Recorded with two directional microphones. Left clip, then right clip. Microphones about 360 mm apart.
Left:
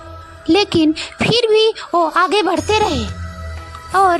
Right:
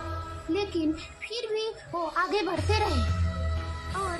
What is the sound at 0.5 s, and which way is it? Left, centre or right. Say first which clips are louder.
Speech: left 14 dB; left.